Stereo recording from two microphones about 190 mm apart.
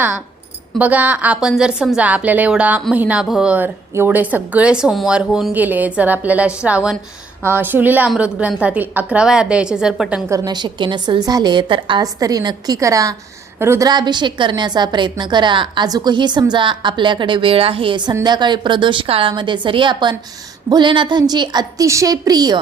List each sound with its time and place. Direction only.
0.8 s a woman's voice: 10° right (ahead or behind)
10.2 s a woman's voice: 20° right (ahead or behind)